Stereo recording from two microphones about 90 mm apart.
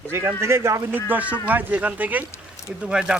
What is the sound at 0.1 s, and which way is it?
Speech, 30° right (ahead or behind).